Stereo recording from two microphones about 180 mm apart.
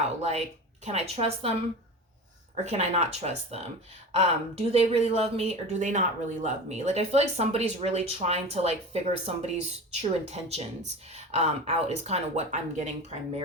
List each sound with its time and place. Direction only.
0.0 s a sound: 35° right (ahead or behind)
0.9 s speech: 35° right (ahead or behind)
2.6 s speech: 40° right (ahead or behind)